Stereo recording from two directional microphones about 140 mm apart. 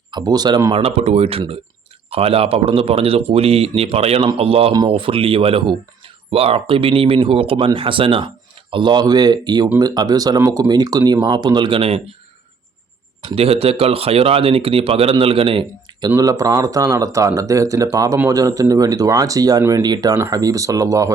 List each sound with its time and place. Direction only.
0.1 s speech: 30° right (ahead or behind)
0.7 s speech: 45° right (ahead or behind)
13.2 s speech: 45° right (ahead or behind); by 21.1 s 25° right (ahead or behind)